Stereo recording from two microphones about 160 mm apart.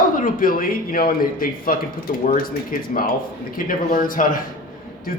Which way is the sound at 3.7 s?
60° left (ahead or behind).